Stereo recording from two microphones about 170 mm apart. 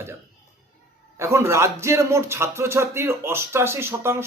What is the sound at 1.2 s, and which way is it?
Speech, 15° right (ahead or behind).